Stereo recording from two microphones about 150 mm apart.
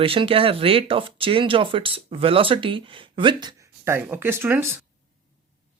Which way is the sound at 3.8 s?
15° right (ahead or behind).